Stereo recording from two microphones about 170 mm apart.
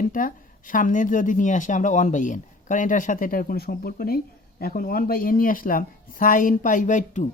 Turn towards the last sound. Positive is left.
turn(degrees=45)  # may be behind; listen again after turning